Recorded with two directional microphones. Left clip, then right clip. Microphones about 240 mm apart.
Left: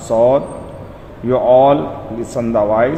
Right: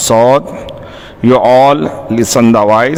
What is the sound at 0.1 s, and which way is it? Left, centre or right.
A man's voice, right.